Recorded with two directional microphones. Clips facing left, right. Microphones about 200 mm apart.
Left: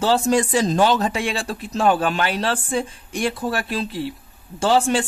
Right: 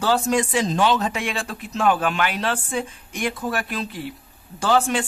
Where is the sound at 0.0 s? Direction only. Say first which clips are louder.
Left 2 dB; 30° left (ahead or behind).